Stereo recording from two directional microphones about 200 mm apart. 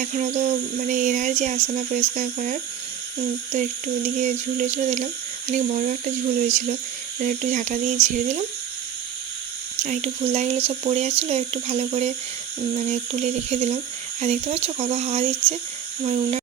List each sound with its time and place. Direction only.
0.0 s speech: 40° right (ahead or behind)
7.2 s speech: 40° right (ahead or behind)
9.8 s speech: 35° right (ahead or behind)